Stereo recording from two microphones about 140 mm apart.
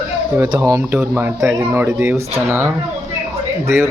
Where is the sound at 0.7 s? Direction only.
15° right (ahead or behind).